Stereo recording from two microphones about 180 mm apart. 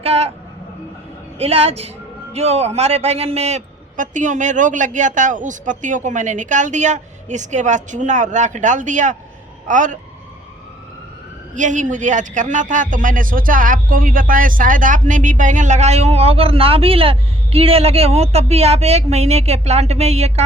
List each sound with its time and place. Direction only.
0.0 s speech: 35° right (ahead or behind)
1.4 s a man's voice: 35° right (ahead or behind)
11.5 s a man's voice: 45° right (ahead or behind)